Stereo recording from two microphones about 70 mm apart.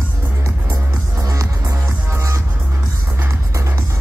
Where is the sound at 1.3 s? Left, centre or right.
Right.